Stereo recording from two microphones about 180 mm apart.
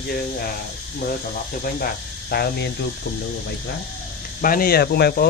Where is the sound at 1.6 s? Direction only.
55° left (ahead or behind).